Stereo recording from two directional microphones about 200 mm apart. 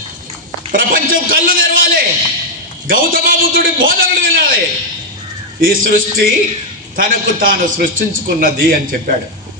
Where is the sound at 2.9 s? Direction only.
45° right (ahead or behind).